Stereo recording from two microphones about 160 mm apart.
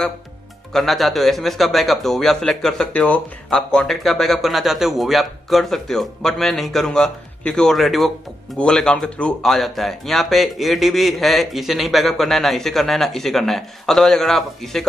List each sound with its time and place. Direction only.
0.7 s speech: centre (ahead or behind)